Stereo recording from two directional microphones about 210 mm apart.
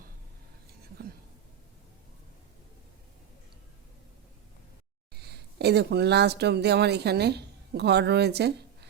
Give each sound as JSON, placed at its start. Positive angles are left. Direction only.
{"t": 5.1, "sound": "speech", "side_deg": -50}